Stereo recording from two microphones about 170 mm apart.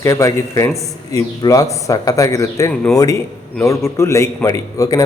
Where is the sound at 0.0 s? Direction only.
15° left (ahead or behind).